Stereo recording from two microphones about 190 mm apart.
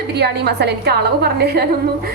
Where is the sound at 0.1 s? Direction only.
60° right (ahead or behind).